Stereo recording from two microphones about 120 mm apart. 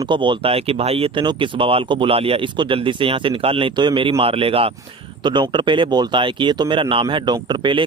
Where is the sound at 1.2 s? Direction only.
40° right (ahead or behind).